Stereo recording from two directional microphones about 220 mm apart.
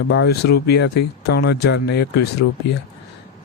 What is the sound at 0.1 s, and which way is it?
Speech, 50° left (ahead or behind).